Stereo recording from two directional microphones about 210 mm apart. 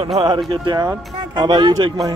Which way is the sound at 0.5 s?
20° right (ahead or behind).